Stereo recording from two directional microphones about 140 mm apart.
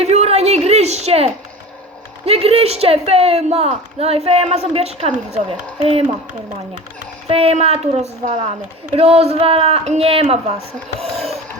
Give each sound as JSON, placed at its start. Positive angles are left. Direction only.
{"t": 0.0, "sound": "a sound", "side_deg": -50}
{"t": 2.2, "sound": "a woman's voice", "side_deg": -45}
{"t": 7.3, "sound": "a woman's voice", "side_deg": -45}